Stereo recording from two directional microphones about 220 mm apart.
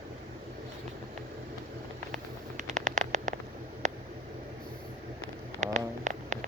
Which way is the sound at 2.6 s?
35° right (ahead or behind).